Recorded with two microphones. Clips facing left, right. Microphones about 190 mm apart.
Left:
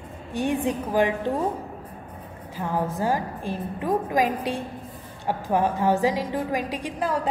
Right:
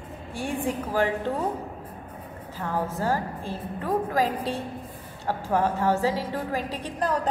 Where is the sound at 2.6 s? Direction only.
15° left (ahead or behind).